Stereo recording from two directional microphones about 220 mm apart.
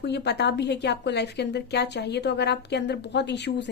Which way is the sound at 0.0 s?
50° left (ahead or behind).